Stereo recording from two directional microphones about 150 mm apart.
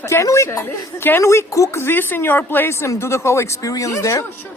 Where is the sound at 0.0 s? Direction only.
20° left (ahead or behind).